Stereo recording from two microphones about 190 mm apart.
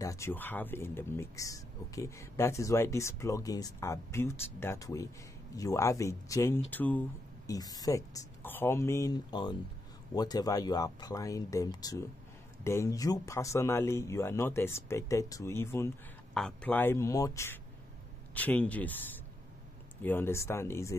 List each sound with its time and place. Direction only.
0.0 s speech: 15° left (ahead or behind)
20.0 s speech: 10° left (ahead or behind)